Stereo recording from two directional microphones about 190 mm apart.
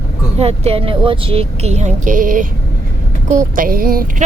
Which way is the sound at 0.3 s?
35° right (ahead or behind).